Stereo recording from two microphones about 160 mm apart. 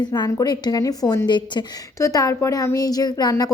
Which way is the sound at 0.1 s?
25° left (ahead or behind).